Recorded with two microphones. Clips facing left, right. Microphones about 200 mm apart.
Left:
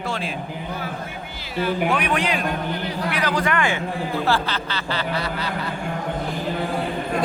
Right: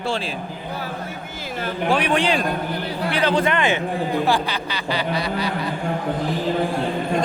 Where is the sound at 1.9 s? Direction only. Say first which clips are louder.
Right 3 dB; 30° right (ahead or behind); by 5.7 s 15° right (ahead or behind).